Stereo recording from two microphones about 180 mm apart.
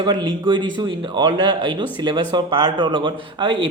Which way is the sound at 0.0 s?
25° right (ahead or behind).